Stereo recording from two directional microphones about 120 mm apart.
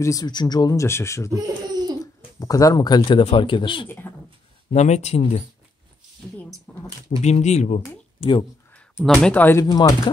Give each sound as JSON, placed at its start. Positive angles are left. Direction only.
{"t": 0.0, "sound": "speech", "side_deg": 30}
{"t": 1.3, "sound": "speech", "side_deg": -35}
{"t": 2.3, "sound": "speech", "side_deg": 30}
{"t": 4.7, "sound": "speech", "side_deg": 70}
{"t": 6.7, "sound": "a sound", "side_deg": 10}
{"t": 7.1, "sound": "speech", "side_deg": 70}
{"t": 8.2, "sound": "speech", "side_deg": 45}
{"t": 9.0, "sound": "speech", "side_deg": 5}
{"t": 9.3, "sound": "speech", "side_deg": 15}
{"t": 9.7, "sound": "speech", "side_deg": 35}